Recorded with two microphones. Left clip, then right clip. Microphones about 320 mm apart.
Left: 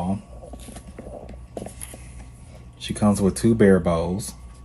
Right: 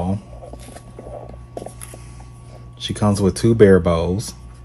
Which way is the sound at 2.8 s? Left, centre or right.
Right.